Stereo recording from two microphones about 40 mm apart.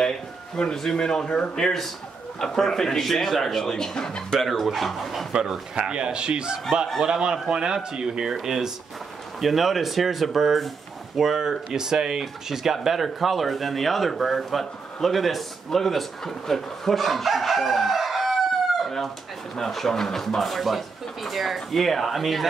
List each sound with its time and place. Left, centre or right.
0.6 s speech: centre
4.4 s speech: centre
5.3 s speech: centre
5.8 s speech: right; by 22.5 s centre